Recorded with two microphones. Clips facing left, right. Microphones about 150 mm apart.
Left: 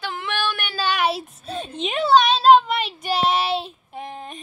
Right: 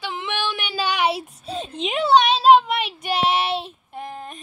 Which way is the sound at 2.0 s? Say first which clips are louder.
Even; 10° right (ahead or behind).